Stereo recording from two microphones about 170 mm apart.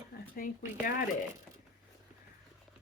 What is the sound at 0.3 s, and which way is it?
Speech, 55° left (ahead or behind).